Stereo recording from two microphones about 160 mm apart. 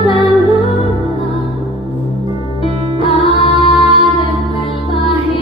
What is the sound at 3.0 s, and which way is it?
Music, 35° left (ahead or behind).